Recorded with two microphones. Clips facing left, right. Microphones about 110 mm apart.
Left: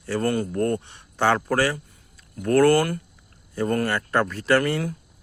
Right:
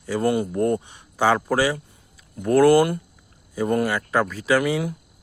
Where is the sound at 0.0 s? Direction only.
10° right (ahead or behind).